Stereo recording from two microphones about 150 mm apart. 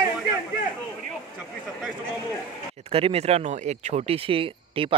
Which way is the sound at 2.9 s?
40° right (ahead or behind).